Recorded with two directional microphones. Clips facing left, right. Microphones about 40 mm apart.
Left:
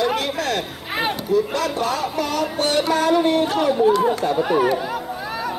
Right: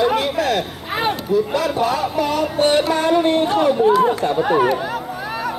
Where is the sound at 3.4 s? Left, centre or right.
Centre.